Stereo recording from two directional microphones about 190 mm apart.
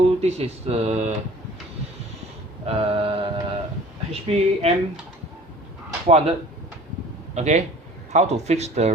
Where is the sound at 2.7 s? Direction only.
30° right (ahead or behind).